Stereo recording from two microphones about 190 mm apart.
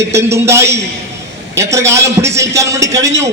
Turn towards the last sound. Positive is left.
turn(degrees=-15)  # may be behind; listen again after turning